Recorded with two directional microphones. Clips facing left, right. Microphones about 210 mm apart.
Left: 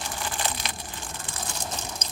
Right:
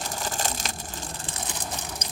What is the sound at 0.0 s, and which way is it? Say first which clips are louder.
Crushing: right 1 dB; 40° right (ahead or behind).